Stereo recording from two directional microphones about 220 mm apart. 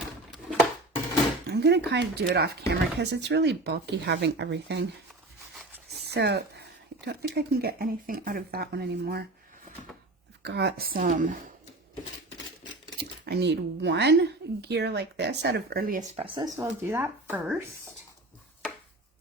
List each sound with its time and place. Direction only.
0.0 s a sound: centre (ahead or behind)
1.5 s speech: 50° right (ahead or behind)
6.1 s speech: 50° right (ahead or behind)
10.4 s speech: 50° right (ahead or behind)
13.0 s speech: 45° right (ahead or behind)
16.1 s speech: 25° right (ahead or behind)
16.6 s speech: 10° right (ahead or behind)